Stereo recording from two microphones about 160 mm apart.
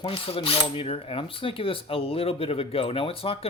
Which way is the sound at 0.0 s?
35° left (ahead or behind).